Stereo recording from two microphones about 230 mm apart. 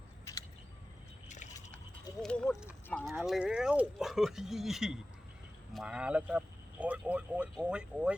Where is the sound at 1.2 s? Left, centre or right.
Left.